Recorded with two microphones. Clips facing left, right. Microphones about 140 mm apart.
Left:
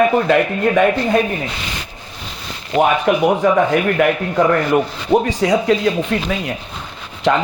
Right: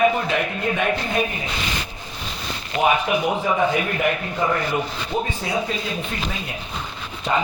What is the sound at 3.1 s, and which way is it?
Speech, 60° left (ahead or behind).